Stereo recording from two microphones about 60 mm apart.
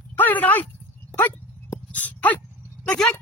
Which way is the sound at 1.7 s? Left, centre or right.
Left.